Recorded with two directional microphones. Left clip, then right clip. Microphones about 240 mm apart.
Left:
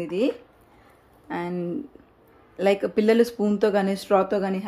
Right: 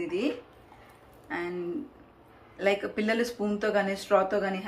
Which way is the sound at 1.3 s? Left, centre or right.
Left.